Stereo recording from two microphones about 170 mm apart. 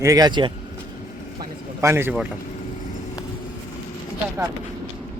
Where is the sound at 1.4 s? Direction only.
15° right (ahead or behind).